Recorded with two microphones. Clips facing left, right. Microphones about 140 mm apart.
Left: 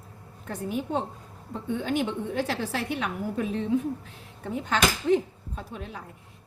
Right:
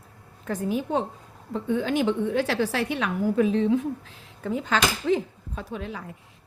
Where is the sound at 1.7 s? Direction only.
90° right.